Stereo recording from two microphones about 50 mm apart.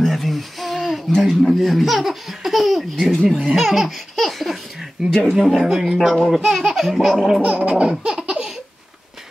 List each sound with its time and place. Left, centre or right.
0.0 s a sound: centre
3.4 s laughter: centre
5.0 s speech: centre
6.3 s laughter: centre
7.4 s laughter: right
7.9 s laughter: centre